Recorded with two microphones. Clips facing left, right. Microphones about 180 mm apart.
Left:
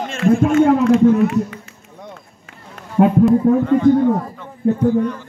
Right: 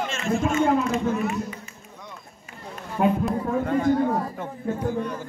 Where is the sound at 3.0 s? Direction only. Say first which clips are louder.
Left 8 dB; 50° left (ahead or behind).